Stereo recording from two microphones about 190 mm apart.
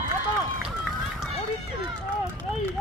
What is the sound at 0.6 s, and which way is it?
Run, centre (ahead or behind).